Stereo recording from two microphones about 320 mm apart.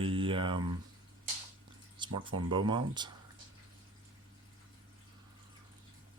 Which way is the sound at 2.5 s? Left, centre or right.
Centre.